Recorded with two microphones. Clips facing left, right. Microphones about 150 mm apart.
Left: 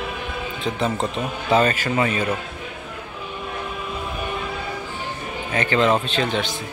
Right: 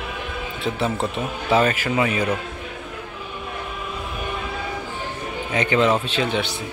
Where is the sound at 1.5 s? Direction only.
10° right (ahead or behind).